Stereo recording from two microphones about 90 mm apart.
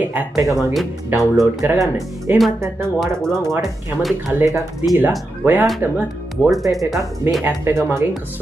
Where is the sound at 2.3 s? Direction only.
25° right (ahead or behind).